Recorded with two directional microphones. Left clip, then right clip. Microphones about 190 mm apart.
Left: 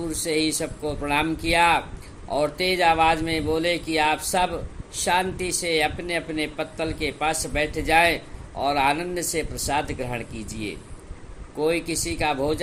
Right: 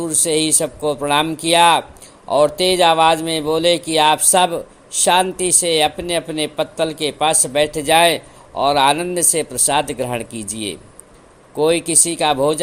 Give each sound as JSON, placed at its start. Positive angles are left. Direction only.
{"t": 0.0, "sound": "a man's voice", "side_deg": -35}